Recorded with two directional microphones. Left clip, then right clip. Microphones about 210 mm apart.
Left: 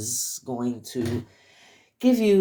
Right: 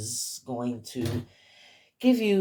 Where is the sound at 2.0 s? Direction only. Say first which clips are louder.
Left 3 dB; 35° left (ahead or behind).